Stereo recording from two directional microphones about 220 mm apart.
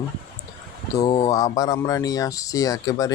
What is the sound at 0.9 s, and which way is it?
Speech, 15° left (ahead or behind).